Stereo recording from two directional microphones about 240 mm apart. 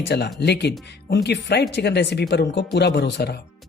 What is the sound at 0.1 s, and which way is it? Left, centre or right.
A man's voice, left.